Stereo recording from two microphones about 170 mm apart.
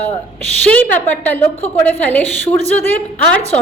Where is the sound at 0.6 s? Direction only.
10° left (ahead or behind).